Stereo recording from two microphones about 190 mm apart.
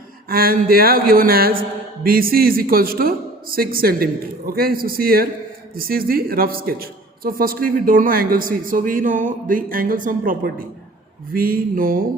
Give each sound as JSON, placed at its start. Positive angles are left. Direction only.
{"t": 0.3, "sound": "a man's voice", "side_deg": -50}